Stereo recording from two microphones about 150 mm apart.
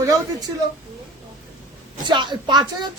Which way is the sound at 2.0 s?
30° right (ahead or behind).